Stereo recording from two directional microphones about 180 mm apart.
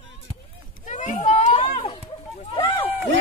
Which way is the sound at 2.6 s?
30° left (ahead or behind).